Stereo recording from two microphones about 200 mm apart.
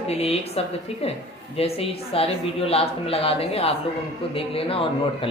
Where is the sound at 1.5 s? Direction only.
30° left (ahead or behind).